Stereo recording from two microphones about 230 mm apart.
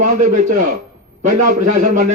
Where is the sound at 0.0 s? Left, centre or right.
Right.